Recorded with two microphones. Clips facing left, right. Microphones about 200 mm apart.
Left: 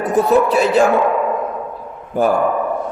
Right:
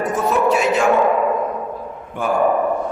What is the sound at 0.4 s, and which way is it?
Speech, 35° left (ahead or behind).